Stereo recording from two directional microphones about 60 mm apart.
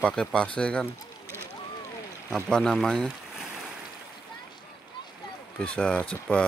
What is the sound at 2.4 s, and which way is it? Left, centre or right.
Speech, centre.